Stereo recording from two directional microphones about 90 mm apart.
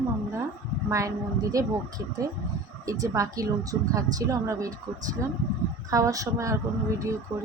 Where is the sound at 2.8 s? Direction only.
40° right (ahead or behind).